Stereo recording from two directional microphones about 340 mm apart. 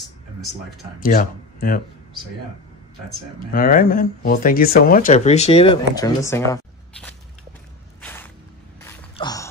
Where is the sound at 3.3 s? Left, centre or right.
Left; by 7.2 s centre.